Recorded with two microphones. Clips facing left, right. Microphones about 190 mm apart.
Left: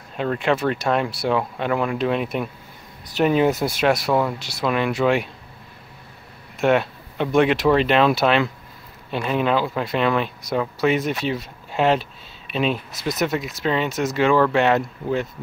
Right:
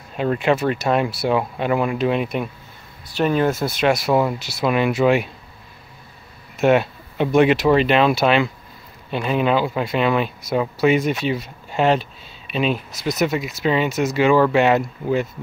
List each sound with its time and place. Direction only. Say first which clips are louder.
0.2 s speech: right 2 dB; 5° right (ahead or behind)
3.2 s speech: left 1 dB; 15° left (ahead or behind)
3.8 s speech: right 2 dB; centre (ahead or behind)
6.6 s speech: right 2 dB; 5° right (ahead or behind)